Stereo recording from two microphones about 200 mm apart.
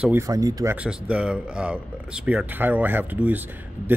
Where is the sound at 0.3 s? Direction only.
20° right (ahead or behind).